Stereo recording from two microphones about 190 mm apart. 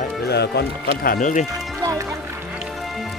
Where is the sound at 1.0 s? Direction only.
45° left (ahead or behind).